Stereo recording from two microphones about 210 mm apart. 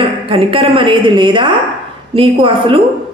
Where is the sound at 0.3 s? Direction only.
25° right (ahead or behind).